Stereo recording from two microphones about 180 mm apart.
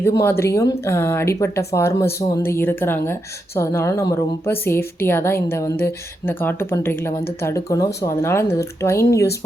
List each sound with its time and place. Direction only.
0.0 s speech: 15° left (ahead or behind)